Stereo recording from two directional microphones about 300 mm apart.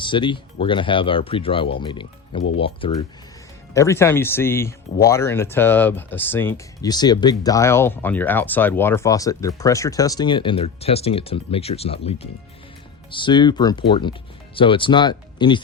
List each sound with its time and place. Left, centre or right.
0.0 s speech: centre